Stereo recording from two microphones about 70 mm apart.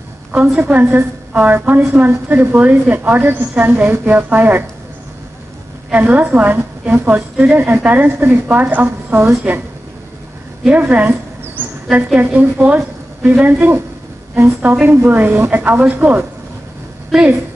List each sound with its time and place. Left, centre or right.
0.3 s a woman's voice: right
5.9 s a woman's voice: right
10.7 s a woman's voice: right